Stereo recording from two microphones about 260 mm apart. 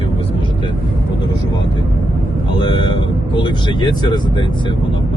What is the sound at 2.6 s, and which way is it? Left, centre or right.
Vehicle, centre.